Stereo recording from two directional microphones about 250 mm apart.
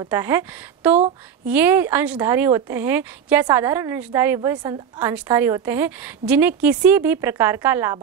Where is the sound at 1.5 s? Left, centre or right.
Centre.